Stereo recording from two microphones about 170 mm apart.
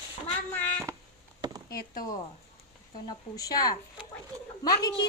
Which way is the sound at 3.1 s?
20° left (ahead or behind).